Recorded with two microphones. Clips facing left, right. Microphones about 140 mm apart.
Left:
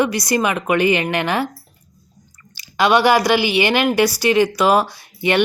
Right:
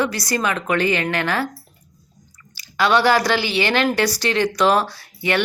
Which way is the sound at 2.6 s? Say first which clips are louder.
Left 2 dB; 20° left (ahead or behind).